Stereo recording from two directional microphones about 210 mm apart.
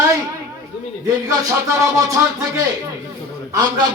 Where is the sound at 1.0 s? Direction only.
15° right (ahead or behind).